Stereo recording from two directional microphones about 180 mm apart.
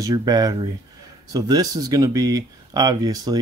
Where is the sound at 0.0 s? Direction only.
20° right (ahead or behind).